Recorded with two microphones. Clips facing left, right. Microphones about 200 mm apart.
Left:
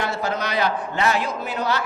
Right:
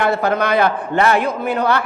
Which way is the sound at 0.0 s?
60° right (ahead or behind).